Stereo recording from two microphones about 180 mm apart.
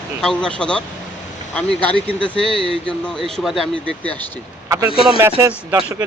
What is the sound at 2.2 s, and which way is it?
Speech, 5° left (ahead or behind).